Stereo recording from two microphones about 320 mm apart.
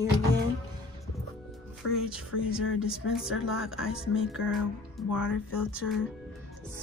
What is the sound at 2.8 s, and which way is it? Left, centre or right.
Speech, centre.